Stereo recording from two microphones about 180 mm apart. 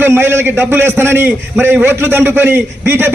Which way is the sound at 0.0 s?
15° right (ahead or behind).